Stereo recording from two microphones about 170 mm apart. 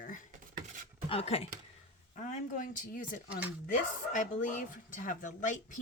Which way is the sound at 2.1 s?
45° left (ahead or behind).